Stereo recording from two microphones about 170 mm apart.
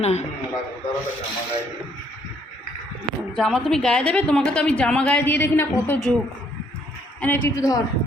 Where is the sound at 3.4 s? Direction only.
Centre (ahead or behind).